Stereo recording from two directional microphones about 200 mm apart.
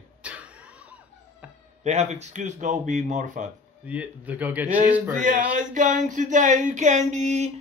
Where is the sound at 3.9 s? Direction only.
5° right (ahead or behind).